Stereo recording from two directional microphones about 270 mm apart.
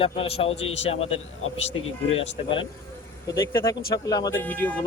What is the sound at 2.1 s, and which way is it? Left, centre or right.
A man's voice, left.